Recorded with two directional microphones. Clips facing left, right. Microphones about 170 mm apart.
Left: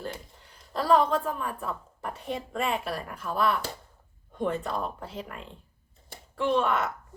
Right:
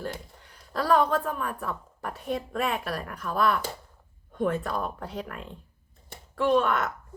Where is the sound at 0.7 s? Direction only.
25° left (ahead or behind).